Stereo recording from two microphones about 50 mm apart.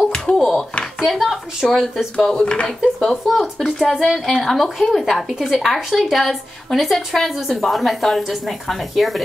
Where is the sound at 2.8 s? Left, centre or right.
Centre.